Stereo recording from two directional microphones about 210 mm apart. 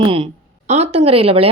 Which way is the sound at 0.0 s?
25° right (ahead or behind).